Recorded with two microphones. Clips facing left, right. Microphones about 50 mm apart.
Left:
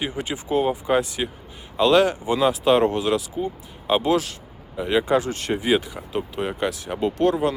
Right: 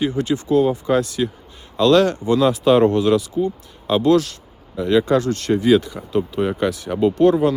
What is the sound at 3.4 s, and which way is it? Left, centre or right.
Speech, centre.